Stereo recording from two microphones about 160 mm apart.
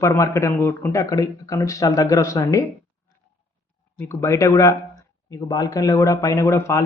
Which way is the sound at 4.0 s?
15° left (ahead or behind).